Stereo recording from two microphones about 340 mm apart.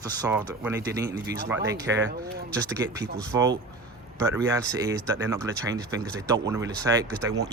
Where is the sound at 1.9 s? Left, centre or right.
Right.